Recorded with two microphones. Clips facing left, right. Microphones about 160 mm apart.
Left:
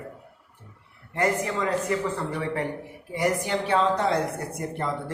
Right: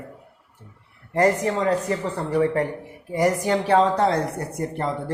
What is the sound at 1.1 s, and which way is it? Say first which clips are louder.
A man's voice: right 5 dB; 35° right (ahead or behind).